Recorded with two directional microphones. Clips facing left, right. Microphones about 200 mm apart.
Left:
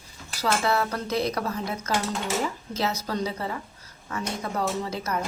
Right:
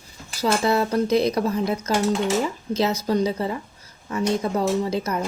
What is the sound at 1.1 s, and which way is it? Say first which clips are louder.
Speech: right 6 dB; 20° right (ahead or behind).